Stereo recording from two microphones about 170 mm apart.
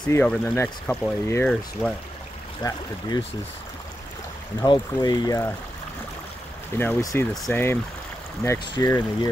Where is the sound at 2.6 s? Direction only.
20° left (ahead or behind).